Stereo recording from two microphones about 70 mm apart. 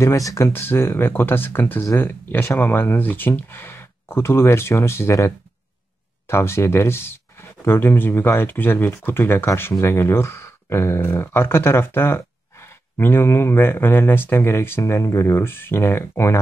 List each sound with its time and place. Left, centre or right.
0.0 s speech: left
0.5 s speech: left
6.2 s speech: left